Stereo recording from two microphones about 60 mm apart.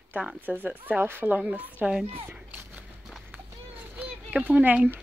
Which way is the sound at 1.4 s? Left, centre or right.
Right.